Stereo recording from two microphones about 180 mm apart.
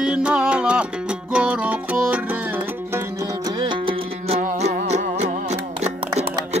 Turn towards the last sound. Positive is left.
turn(degrees=-35)  # may be behind; listen again after turning